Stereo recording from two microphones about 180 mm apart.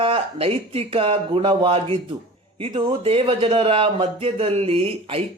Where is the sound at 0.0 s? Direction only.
30° right (ahead or behind).